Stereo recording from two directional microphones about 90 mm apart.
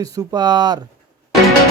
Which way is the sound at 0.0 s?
40° right (ahead or behind).